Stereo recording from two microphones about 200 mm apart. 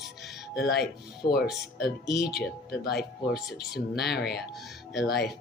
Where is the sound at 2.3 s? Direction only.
55° left (ahead or behind).